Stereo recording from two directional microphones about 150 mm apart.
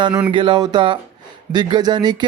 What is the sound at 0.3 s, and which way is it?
Music, 35° right (ahead or behind).